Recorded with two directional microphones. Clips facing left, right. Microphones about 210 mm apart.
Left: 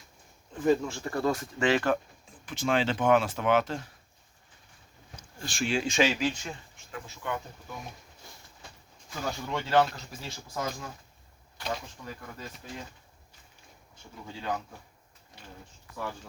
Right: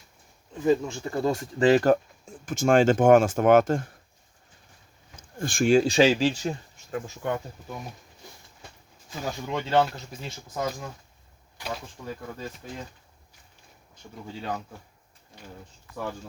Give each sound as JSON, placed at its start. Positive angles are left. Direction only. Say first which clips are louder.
{"t": 0.6, "sound": "speech", "louder": "right 2 dB", "side_deg": -20}
{"t": 1.5, "sound": "speech", "louder": "right 9 dB", "side_deg": -35}
{"t": 5.4, "sound": "speech", "louder": "right 10 dB", "side_deg": -50}
{"t": 9.0, "sound": "speech", "louder": "right 2 dB", "side_deg": -20}